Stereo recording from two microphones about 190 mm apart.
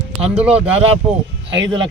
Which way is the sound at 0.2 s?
5° right (ahead or behind).